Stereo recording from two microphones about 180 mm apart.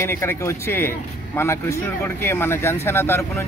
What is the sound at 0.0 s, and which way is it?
A man's voice, 15° left (ahead or behind).